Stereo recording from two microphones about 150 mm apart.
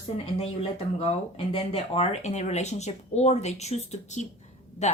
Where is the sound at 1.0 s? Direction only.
40° left (ahead or behind).